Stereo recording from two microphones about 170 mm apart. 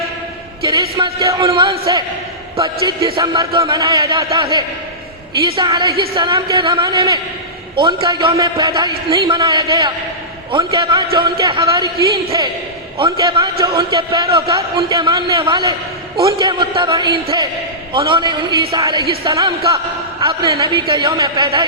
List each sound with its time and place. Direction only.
0.7 s a man's voice: 30° right (ahead or behind)